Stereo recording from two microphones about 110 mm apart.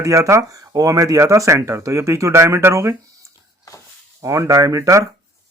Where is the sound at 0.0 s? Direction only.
30° right (ahead or behind).